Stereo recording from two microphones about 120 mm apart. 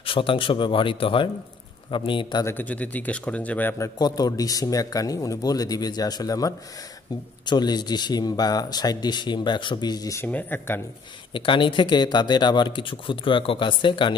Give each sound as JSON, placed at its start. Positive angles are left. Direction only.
{"t": 0.0, "sound": "speech", "side_deg": 50}
{"t": 2.4, "sound": "speech", "side_deg": 15}
{"t": 3.7, "sound": "a man's voice", "side_deg": 30}
{"t": 10.2, "sound": "speech", "side_deg": 15}
{"t": 11.3, "sound": "speech", "side_deg": 45}